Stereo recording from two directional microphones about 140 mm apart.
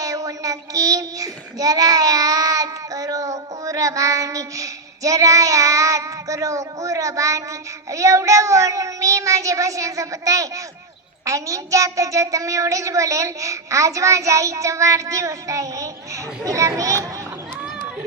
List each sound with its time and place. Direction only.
0.0 s child singing: 25° right (ahead or behind)
7.9 s a child's voice: 20° right (ahead or behind)